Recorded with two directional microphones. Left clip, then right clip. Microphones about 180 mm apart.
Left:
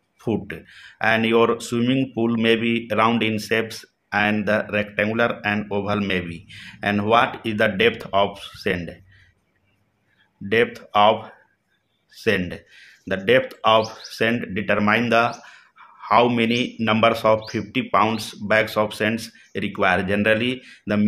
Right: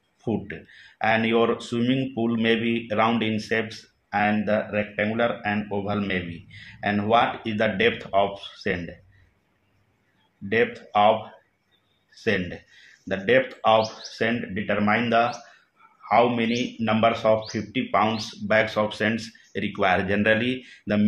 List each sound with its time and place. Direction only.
0.2 s speech: 30° left (ahead or behind)
10.5 s speech: 30° left (ahead or behind)